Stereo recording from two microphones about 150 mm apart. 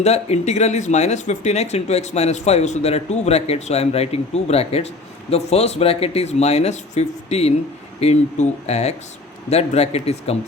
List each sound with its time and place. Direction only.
0.0 s speech: 45° left (ahead or behind)